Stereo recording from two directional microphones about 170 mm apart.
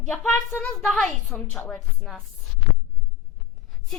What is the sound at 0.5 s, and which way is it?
A woman's voice, 5° left (ahead or behind).